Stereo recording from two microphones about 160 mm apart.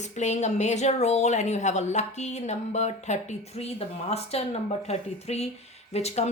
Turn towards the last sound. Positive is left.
turn(degrees=40)  # may be behind; listen again after turning